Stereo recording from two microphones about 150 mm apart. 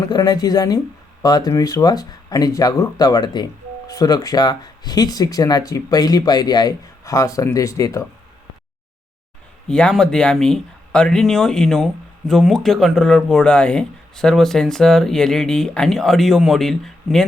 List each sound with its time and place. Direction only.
0.0 s speech: 25° left (ahead or behind)
9.6 s speech: 5° left (ahead or behind)